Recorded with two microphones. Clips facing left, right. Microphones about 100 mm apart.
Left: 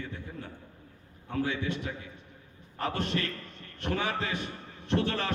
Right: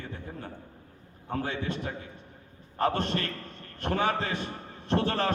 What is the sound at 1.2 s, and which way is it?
A man's voice, 40° right (ahead or behind).